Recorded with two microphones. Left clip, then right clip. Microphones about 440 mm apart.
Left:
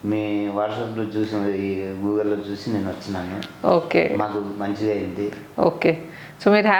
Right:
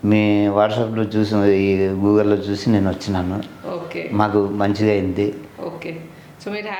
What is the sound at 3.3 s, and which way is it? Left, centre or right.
Speech, left.